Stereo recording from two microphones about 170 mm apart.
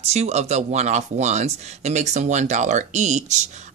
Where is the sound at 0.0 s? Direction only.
40° right (ahead or behind).